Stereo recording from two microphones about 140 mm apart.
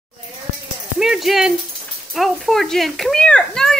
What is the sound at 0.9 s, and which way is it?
Rattle, 5° right (ahead or behind).